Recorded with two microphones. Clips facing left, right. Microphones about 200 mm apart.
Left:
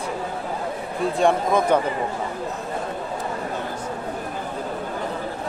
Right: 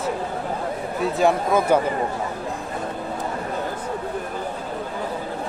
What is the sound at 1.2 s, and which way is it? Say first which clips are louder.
Speech: even; 5° right (ahead or behind).